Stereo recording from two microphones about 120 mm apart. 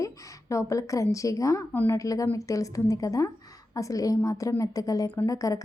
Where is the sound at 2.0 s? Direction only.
30° left (ahead or behind).